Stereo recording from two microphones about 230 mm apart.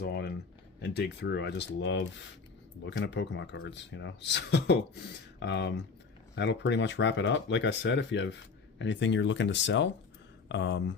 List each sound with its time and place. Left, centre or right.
0.0 s speech: left